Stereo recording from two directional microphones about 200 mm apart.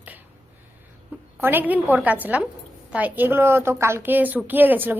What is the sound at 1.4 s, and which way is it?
A woman's voice, 10° right (ahead or behind).